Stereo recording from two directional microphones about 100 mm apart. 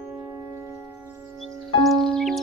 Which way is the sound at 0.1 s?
30° right (ahead or behind).